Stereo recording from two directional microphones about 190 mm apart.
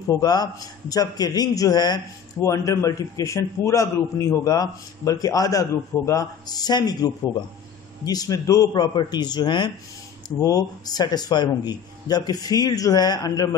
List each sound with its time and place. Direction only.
0.1 s a man's voice: 20° left (ahead or behind)